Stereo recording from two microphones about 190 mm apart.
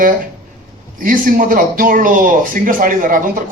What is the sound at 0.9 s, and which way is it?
Speech, 45° right (ahead or behind).